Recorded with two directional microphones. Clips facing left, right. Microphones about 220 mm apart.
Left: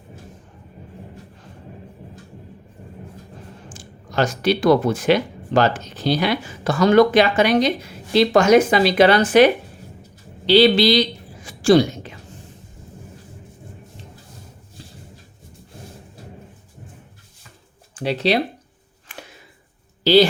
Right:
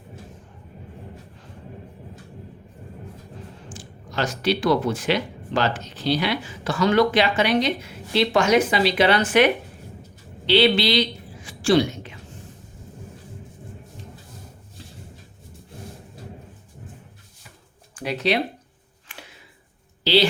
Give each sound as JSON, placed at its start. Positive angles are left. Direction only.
{"t": 3.7, "sound": "speech", "side_deg": 45}
{"t": 11.4, "sound": "a sound", "side_deg": 40}
{"t": 17.9, "sound": "speech", "side_deg": 30}